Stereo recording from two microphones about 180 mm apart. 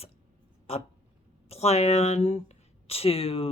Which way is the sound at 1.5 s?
35° left (ahead or behind).